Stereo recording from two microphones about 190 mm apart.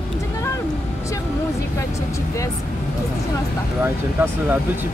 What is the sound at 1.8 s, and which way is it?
Speech, 15° left (ahead or behind).